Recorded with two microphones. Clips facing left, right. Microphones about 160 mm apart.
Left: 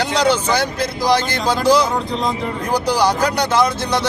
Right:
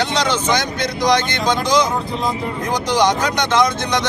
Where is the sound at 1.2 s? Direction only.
35° left (ahead or behind).